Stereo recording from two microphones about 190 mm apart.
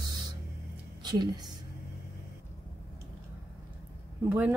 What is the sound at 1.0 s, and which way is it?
Speech, 20° right (ahead or behind).